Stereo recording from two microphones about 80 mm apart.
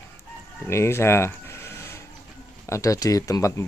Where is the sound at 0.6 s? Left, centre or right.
Left.